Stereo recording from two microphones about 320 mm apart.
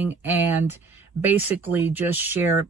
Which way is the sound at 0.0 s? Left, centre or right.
Centre.